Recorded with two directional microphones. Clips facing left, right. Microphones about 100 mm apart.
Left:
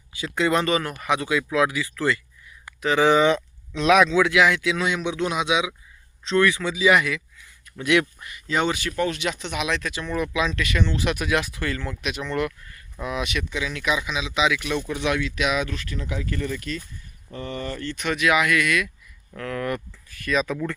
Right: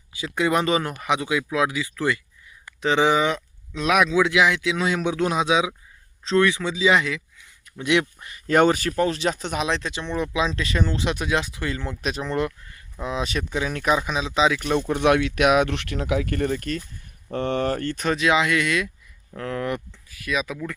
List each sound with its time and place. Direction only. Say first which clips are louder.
0.2 s speech: even; 15° right (ahead or behind)
3.1 s speech: left 3 dB; 5° right (ahead or behind)
4.2 s speech: even; 20° right (ahead or behind)
4.9 s speech: right 2 dB; 40° right (ahead or behind)
8.4 s speech: right 6 dB; 50° right (ahead or behind); by 11.9 s 20° right (ahead or behind)
12.0 s speech: right 2 dB; 35° right (ahead or behind)
14.8 s speech: right 9 dB; 50° right (ahead or behind); by 16.3 s 75° right (ahead or behind)
16.3 s speech: right 4 dB; 50° right (ahead or behind)
17.3 s speech: right 8 dB; 70° right (ahead or behind); by 19.8 s 25° right (ahead or behind)
20.1 s speech: left 3 dB; 5° right (ahead or behind)